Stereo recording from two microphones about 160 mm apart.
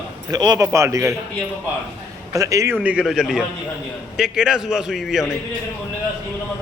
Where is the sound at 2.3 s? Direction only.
20° right (ahead or behind).